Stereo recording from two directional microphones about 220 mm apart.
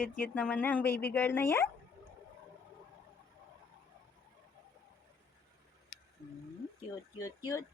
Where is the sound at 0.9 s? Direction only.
10° left (ahead or behind).